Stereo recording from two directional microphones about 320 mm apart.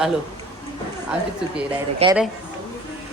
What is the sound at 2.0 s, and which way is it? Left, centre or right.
Speech, centre.